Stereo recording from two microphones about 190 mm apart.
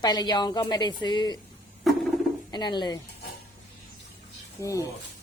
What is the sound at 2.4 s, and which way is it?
Speech, 25° left (ahead or behind).